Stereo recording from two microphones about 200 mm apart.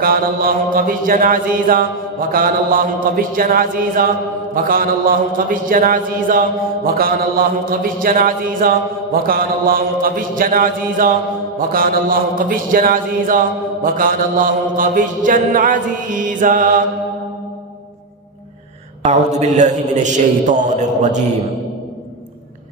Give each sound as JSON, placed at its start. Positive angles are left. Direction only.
{"t": 0.0, "sound": "mantra", "side_deg": -45}
{"t": 19.0, "sound": "mantra", "side_deg": -35}